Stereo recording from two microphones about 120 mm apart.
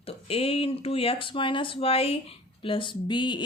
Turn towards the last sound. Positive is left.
turn(degrees=40)  # may be behind; listen again after turning